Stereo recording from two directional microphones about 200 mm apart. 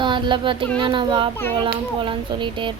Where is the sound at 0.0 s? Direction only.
25° right (ahead or behind).